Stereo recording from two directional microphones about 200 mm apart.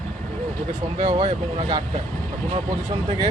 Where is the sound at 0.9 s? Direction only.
20° right (ahead or behind).